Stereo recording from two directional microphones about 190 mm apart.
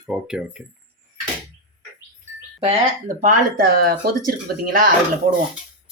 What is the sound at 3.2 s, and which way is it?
Speech, 50° right (ahead or behind).